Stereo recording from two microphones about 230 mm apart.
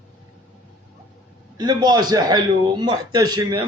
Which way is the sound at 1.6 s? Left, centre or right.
Centre.